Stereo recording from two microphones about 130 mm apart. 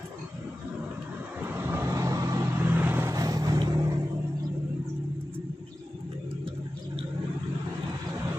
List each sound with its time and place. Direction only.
1.4 s vehicle: 15° right (ahead or behind)